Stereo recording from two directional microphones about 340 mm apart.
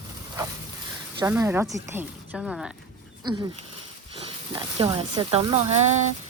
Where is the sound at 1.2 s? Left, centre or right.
Centre.